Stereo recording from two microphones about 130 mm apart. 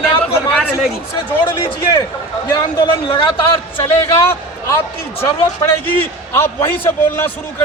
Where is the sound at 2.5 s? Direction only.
40° left (ahead or behind).